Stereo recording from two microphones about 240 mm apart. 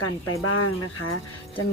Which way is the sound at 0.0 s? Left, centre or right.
Left.